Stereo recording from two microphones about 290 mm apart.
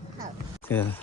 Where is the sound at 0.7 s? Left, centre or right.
Centre.